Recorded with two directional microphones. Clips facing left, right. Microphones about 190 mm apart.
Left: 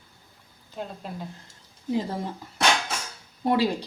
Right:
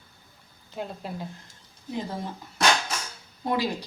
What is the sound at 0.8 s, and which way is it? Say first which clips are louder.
Speech: right 1 dB; 5° right (ahead or behind).